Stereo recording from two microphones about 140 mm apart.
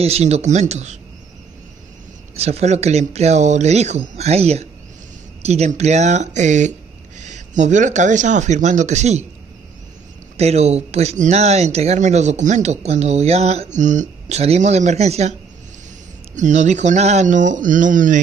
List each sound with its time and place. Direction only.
0.0 s speech: 50° right (ahead or behind)
2.3 s speech: 50° right (ahead or behind)
10.3 s speech: 50° right (ahead or behind)
16.3 s speech: 60° right (ahead or behind)